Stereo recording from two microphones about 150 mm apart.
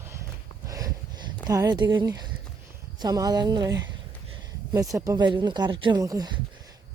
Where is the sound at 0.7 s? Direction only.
25° right (ahead or behind).